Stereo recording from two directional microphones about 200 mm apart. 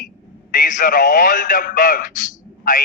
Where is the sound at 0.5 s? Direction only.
40° left (ahead or behind).